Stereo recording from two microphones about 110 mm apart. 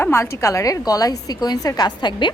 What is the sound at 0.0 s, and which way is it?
A woman's voice, 25° left (ahead or behind).